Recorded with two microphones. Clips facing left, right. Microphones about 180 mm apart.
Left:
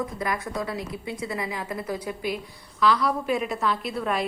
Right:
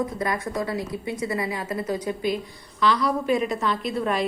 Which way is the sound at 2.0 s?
5° left (ahead or behind).